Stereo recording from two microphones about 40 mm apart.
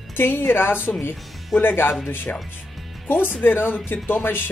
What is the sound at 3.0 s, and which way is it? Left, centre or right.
Speech, left.